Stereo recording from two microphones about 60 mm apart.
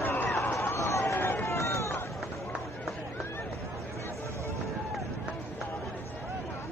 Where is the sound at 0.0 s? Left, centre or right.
Left.